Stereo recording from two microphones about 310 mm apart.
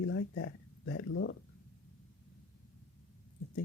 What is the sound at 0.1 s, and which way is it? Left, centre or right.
Speech, left.